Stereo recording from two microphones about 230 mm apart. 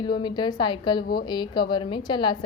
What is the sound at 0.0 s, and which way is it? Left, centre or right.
A woman's voice, centre.